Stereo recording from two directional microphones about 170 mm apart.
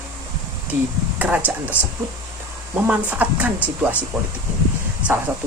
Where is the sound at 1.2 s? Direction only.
10° right (ahead or behind).